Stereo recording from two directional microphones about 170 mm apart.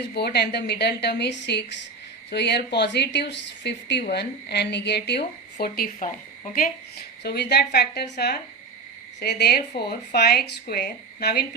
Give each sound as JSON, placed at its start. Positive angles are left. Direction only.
{"t": 0.1, "sound": "speech", "side_deg": 70}